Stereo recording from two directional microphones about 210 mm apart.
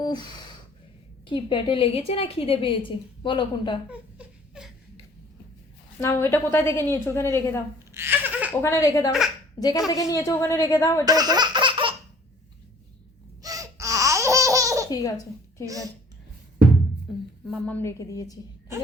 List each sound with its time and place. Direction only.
0.0 s a sound: 20° left (ahead or behind)
1.3 s a woman's voice: 25° left (ahead or behind)
3.8 s a sound: 5° right (ahead or behind)
6.0 s a woman's voice: 10° left (ahead or behind)
7.9 s laughter: 10° right (ahead or behind)
8.6 s a woman's voice: 15° left (ahead or behind)
11.0 s laughter: 20° right (ahead or behind)
13.4 s laughter: 15° right (ahead or behind)
14.8 s a woman's voice: 20° left (ahead or behind)
15.6 s a child's voice: 15° right (ahead or behind)
17.4 s a woman's voice: 5° left (ahead or behind)